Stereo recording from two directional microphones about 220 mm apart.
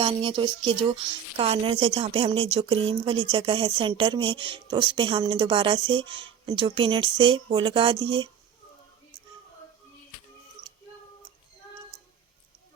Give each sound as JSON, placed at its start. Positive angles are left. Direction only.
{"t": 0.0, "sound": "speech", "side_deg": -25}